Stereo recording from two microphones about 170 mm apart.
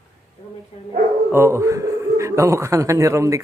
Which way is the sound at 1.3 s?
15° right (ahead or behind).